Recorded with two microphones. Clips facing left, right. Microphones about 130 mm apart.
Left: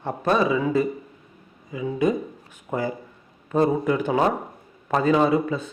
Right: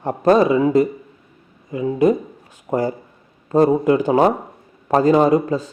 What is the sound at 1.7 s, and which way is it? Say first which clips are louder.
A man's voice: right 6 dB; 50° right (ahead or behind).